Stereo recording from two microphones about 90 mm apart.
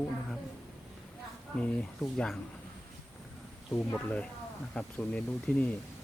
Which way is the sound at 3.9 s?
15° left (ahead or behind).